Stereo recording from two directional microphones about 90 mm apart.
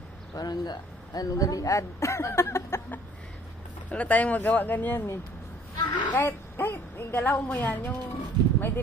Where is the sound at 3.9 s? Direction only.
15° left (ahead or behind).